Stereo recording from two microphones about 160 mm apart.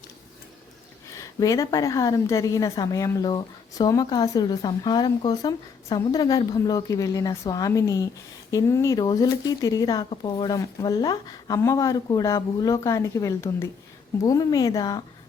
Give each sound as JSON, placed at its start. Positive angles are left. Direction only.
{"t": 1.1, "sound": "a woman's voice", "side_deg": 20}